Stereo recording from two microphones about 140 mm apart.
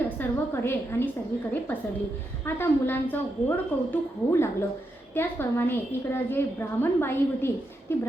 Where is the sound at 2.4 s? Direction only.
15° left (ahead or behind).